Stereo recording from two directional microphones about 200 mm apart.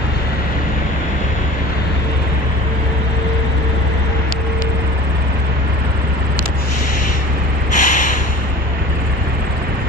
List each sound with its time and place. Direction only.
7.7 s snort: 40° left (ahead or behind)